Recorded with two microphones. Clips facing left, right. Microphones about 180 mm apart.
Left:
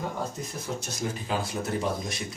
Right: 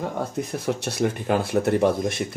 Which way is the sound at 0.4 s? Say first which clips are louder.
Right 8 dB; 65° right (ahead or behind).